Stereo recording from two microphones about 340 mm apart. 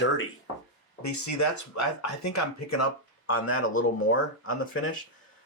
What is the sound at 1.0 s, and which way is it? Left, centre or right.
Speech, left.